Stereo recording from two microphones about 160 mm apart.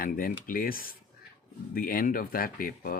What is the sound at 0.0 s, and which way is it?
Speech, 65° left (ahead or behind).